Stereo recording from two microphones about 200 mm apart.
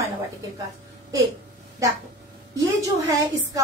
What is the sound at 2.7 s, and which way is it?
Speech, 15° right (ahead or behind).